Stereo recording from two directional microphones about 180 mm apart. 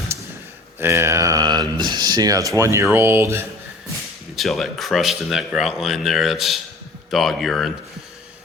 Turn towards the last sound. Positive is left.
turn(degrees=0)  # may be behind; listen again after turning